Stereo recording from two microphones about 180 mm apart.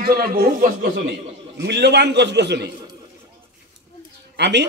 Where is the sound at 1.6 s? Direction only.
70° right (ahead or behind).